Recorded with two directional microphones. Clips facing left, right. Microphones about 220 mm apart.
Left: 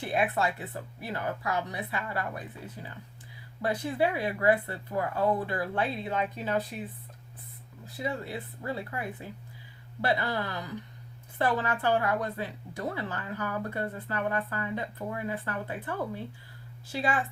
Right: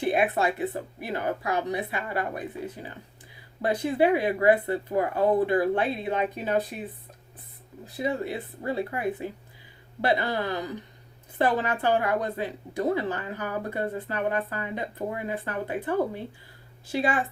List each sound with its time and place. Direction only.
0.0 s speech: 15° right (ahead or behind)
3.6 s speech: 20° right (ahead or behind)
7.9 s speech: 20° right (ahead or behind)